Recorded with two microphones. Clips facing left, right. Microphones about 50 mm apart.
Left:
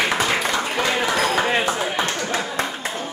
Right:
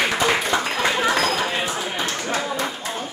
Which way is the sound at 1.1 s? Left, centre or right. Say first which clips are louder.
Left 1 dB; centre.